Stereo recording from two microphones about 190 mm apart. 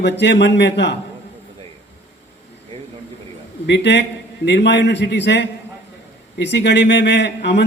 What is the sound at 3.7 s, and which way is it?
A man's voice, 65° left (ahead or behind).